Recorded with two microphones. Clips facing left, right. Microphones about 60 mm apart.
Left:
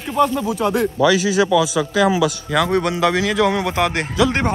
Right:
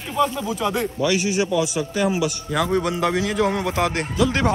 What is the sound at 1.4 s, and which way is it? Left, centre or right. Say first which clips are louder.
A man's voice: left 5 dB; left.